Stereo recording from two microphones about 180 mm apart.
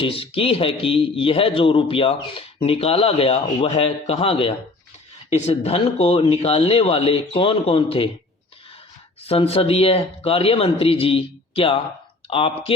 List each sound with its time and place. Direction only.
0.0 s a man's voice: 30° left (ahead or behind)
9.2 s a man's voice: 35° left (ahead or behind)